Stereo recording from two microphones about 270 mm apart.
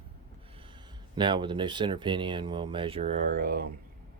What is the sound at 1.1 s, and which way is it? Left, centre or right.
Speech, centre.